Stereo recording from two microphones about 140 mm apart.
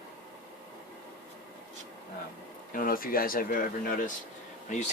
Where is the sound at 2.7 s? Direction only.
90° left; by 4.1 s 75° left (ahead or behind).